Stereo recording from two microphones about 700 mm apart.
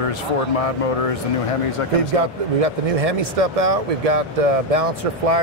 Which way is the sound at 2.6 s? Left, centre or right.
Right.